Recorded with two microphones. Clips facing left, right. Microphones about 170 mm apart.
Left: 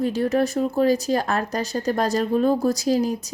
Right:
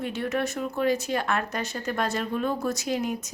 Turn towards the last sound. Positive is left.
turn(degrees=35)  # may be behind; listen again after turning